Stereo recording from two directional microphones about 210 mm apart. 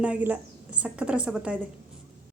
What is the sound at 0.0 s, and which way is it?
A woman's voice, 5° right (ahead or behind).